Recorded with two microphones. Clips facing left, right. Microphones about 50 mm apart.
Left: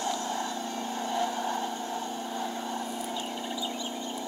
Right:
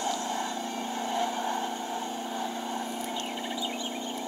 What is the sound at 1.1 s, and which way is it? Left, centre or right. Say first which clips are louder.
Vehicle: even; centre.